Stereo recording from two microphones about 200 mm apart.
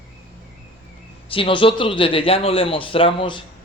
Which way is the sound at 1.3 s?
25° left (ahead or behind).